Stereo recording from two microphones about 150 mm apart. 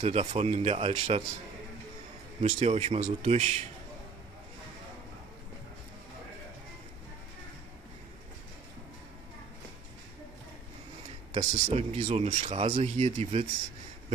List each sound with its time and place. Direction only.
0.0 s speech: 40° right (ahead or behind)
2.4 s speech: 45° right (ahead or behind)
11.3 s speech: 45° right (ahead or behind)